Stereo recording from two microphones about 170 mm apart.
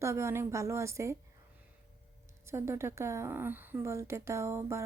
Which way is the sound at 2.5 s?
15° right (ahead or behind).